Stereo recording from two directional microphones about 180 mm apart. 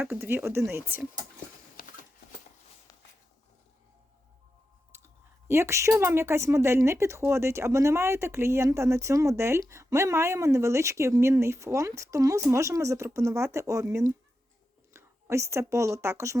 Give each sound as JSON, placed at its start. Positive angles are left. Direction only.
{"t": 0.0, "sound": "speech", "side_deg": -10}
{"t": 4.9, "sound": "speech", "side_deg": -15}